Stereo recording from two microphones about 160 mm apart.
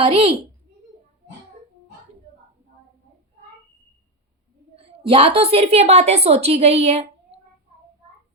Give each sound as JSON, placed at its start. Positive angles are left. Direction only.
{"t": 0.0, "sound": "a woman's voice", "side_deg": -35}
{"t": 4.8, "sound": "a woman's voice", "side_deg": -35}